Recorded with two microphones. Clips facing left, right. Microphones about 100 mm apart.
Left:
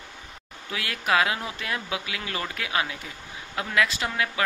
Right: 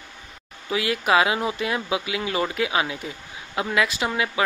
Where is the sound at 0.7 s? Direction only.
15° right (ahead or behind).